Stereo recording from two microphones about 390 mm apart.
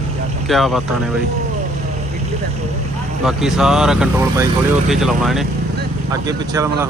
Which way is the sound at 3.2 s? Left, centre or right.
Centre.